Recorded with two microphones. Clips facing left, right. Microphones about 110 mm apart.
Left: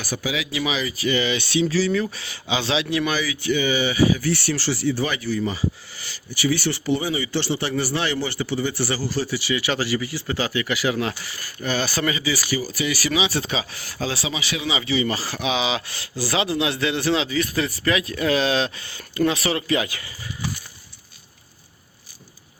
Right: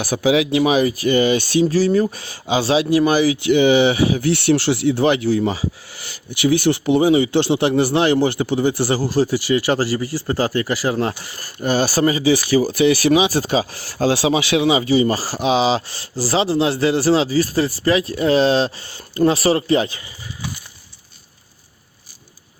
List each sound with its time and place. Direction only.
0.0 s speech: 70° right (ahead or behind); by 3.3 s 45° right (ahead or behind)
3.4 s speech: 60° right (ahead or behind)
5.5 s speech: 80° right; by 14.1 s 40° right (ahead or behind)
14.1 s speech: 65° right (ahead or behind)
14.7 s speech: 45° right (ahead or behind); by 20.1 s 25° right (ahead or behind)